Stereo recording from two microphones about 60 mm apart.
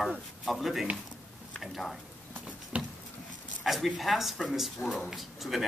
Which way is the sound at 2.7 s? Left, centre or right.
Right.